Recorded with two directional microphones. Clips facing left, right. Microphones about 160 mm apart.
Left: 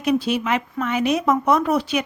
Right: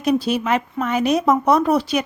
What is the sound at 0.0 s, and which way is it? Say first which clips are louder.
Speech: right 1 dB; 40° right (ahead or behind).